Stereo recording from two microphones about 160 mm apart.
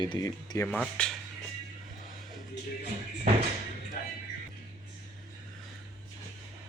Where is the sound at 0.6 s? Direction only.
5° left (ahead or behind).